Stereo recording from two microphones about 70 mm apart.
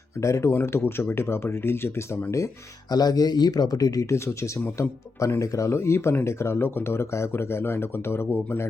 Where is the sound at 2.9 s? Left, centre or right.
Left.